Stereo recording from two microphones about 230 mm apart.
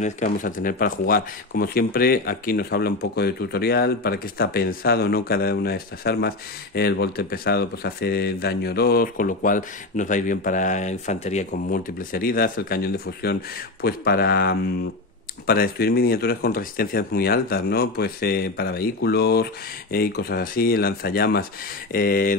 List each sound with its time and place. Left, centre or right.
0.0 s speech: left